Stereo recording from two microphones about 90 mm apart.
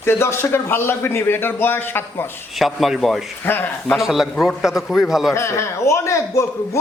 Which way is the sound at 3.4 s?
20° left (ahead or behind).